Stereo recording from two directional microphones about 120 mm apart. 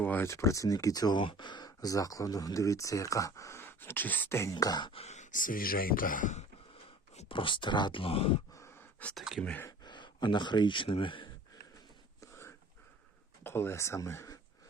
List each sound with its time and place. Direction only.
0.0 s speech: 15° left (ahead or behind)
4.5 s speech: 35° left (ahead or behind)
4.9 s speech: 60° left (ahead or behind); by 6.4 s 90° left
7.3 s speech: 45° left (ahead or behind)
8.5 s a sound: 25° left (ahead or behind)
9.1 s speech: 5° right (ahead or behind)
9.4 s speech: 10° left (ahead or behind)
9.6 s speech: 40° left (ahead or behind)
12.2 s a sound: 20° left (ahead or behind)
13.4 s speech: 20° left (ahead or behind)